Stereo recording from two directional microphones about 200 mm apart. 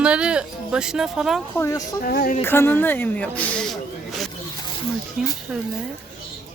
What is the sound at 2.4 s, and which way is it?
Speech, 10° left (ahead or behind).